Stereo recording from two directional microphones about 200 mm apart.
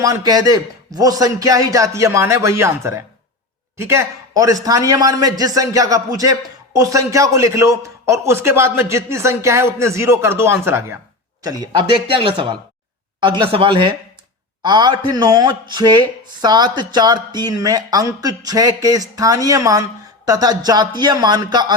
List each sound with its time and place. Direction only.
0.0 s a man's voice: 20° right (ahead or behind)